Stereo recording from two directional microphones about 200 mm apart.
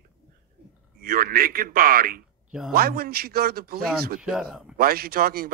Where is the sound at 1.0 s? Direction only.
45° right (ahead or behind).